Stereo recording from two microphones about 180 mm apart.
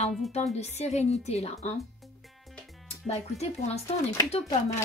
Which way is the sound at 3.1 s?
35° left (ahead or behind).